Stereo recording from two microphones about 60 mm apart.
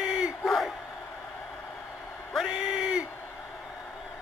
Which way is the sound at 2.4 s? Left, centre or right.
Centre.